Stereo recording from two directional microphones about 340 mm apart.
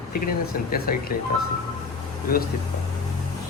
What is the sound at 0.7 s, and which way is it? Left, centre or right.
Speech, left.